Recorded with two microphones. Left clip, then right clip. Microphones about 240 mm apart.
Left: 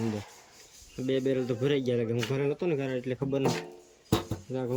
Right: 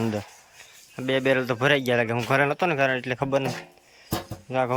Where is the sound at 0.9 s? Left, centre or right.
Centre.